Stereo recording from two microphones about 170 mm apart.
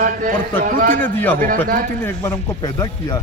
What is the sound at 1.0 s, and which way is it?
Speech, 10° left (ahead or behind).